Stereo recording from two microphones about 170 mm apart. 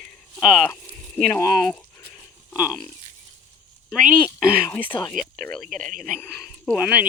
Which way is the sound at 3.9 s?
5° left (ahead or behind).